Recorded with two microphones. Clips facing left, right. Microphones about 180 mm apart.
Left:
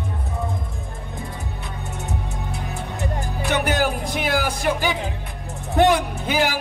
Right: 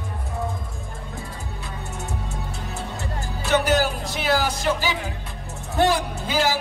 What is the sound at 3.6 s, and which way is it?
Music, 55° left (ahead or behind).